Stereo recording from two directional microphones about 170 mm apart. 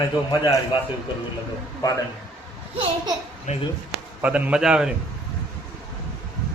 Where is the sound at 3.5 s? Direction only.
45° left (ahead or behind).